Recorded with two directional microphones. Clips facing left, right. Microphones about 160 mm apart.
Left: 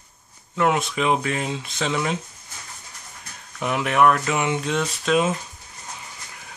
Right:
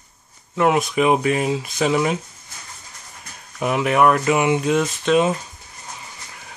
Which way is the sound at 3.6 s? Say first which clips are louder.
Right 2 dB; 5° right (ahead or behind).